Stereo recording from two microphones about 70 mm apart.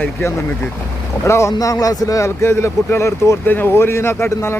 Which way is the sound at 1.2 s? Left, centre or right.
Left.